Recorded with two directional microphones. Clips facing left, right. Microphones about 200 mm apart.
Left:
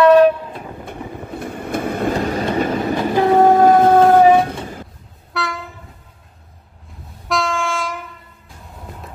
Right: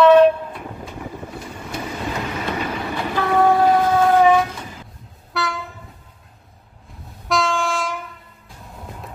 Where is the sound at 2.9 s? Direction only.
20° left (ahead or behind).